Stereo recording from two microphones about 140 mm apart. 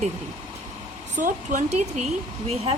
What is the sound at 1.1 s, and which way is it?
Speech, 60° right (ahead or behind).